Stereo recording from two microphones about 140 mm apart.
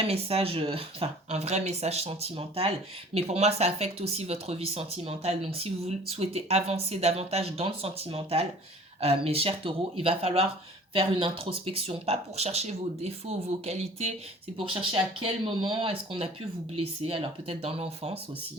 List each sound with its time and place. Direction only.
0.1 s speech: 45° right (ahead or behind)